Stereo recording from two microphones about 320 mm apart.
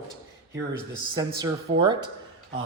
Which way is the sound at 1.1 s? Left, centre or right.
Centre.